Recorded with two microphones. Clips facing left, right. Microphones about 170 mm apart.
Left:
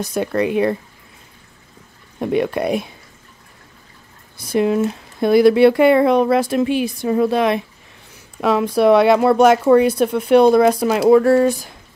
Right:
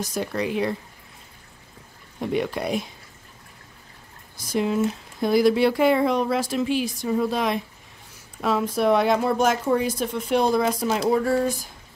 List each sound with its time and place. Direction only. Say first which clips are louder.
0.0 s speech: left 7 dB; 60° left (ahead or behind)
2.1 s speech: left 6 dB; 60° left (ahead or behind)
4.4 s speech: left 6 dB; 60° left (ahead or behind)